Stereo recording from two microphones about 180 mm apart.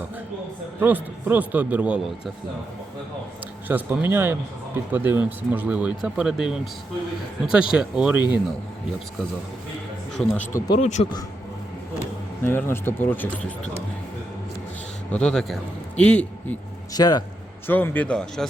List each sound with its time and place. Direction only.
0.8 s speech: 10° right (ahead or behind)
3.7 s speech: 10° right (ahead or behind)
10.2 s speech: 10° left (ahead or behind)
10.8 s a man's voice: 40° left (ahead or behind)
12.4 s speech: 10° left (ahead or behind)
15.1 s a man's voice: 5° left (ahead or behind)
16.9 s a man's voice: 20° left (ahead or behind)
17.7 s speech: 10° left (ahead or behind)